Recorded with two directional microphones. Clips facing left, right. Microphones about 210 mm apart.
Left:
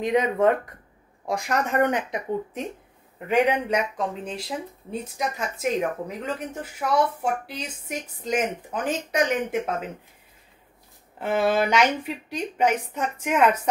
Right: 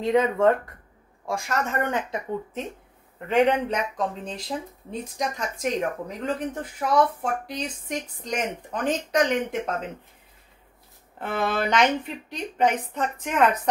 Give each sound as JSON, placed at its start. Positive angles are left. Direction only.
{"t": 0.0, "sound": "speech", "side_deg": 15}
{"t": 11.1, "sound": "speech", "side_deg": 10}